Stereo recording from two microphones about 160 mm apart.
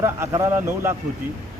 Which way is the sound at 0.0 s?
20° right (ahead or behind).